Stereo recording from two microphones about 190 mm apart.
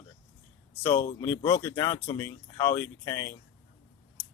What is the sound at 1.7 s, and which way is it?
Speech, 15° left (ahead or behind).